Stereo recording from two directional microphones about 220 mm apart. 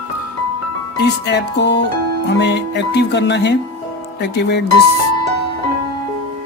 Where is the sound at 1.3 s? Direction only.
50° left (ahead or behind).